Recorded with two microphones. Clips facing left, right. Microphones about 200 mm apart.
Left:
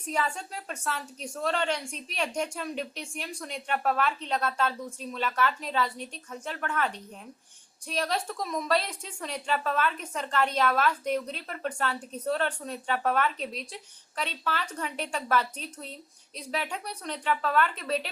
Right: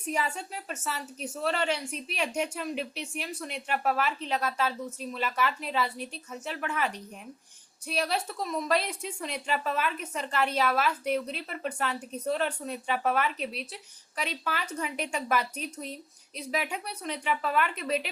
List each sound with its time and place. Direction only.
0.0 s a woman's voice: 10° right (ahead or behind)